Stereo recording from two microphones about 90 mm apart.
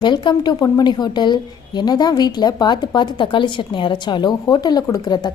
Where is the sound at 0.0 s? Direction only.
55° left (ahead or behind).